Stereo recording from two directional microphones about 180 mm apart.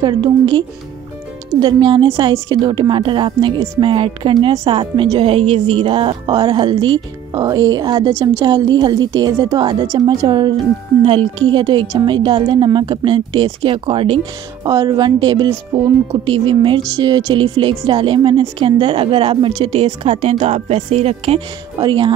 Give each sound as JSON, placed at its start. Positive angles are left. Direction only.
{"t": 0.0, "sound": "speech", "side_deg": -25}